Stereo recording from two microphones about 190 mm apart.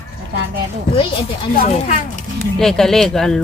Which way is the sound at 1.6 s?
40° left (ahead or behind).